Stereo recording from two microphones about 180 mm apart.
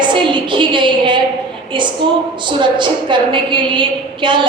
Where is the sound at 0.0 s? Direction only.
25° right (ahead or behind).